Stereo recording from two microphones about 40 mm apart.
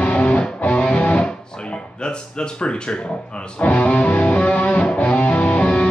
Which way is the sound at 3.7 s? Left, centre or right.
Left.